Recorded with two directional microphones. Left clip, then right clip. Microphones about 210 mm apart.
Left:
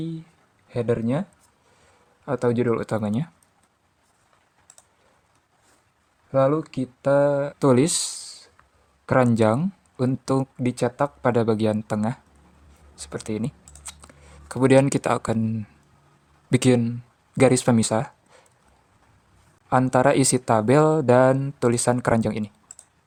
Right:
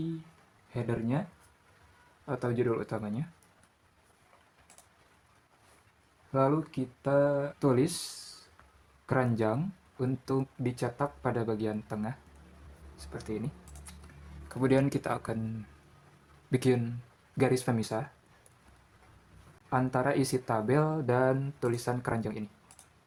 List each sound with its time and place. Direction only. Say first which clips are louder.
0.7 s speech: left 10 dB; 45° left (ahead or behind)
2.2 s speech: left 9 dB; 45° left (ahead or behind)
6.3 s speech: left 8 dB; 45° left (ahead or behind)
9.0 s speech: left 11 dB; 50° left (ahead or behind)
16.5 s speech: left 9 dB; 45° left (ahead or behind)
19.7 s speech: left 11 dB; 50° left (ahead or behind)